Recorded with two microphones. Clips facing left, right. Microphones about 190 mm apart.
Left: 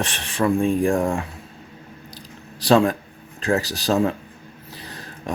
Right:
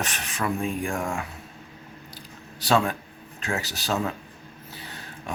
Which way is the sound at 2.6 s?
35° left (ahead or behind).